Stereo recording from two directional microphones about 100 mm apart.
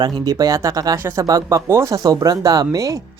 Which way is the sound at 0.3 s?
35° right (ahead or behind).